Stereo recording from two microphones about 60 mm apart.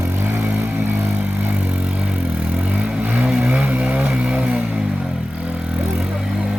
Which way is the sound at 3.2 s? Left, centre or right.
Centre.